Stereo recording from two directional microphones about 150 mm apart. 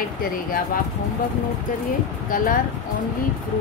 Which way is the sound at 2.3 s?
65° left (ahead or behind).